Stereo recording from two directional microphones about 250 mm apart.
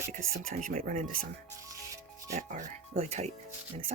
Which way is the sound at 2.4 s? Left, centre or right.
Right.